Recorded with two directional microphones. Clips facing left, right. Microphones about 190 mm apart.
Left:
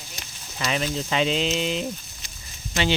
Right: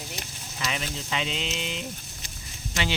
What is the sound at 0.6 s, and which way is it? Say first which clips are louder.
Speech: left 6 dB; 45° left (ahead or behind).